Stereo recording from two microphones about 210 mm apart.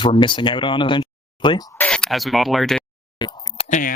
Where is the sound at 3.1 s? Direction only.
20° left (ahead or behind).